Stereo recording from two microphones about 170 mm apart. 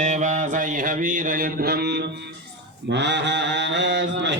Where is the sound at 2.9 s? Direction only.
90° right.